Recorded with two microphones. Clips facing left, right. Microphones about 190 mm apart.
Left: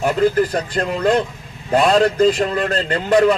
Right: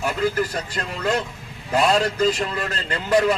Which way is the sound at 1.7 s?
55° left (ahead or behind).